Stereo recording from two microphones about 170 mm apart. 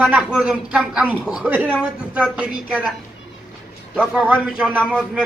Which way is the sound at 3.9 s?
10° right (ahead or behind).